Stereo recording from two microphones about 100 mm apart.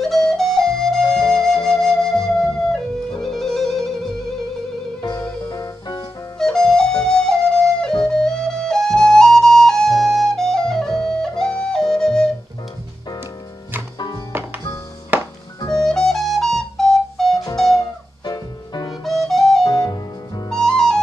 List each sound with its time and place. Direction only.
0.0 s flute: 5° left (ahead or behind)
5.1 s music: 35° left (ahead or behind)
6.4 s flute: 5° left (ahead or behind)
15.1 s music: 20° right (ahead or behind)
15.7 s flute: 5° left (ahead or behind)
17.7 s music: 45° left (ahead or behind)
19.0 s flute: centre (ahead or behind)
19.6 s music: 45° left (ahead or behind)
20.4 s music: 5° left (ahead or behind)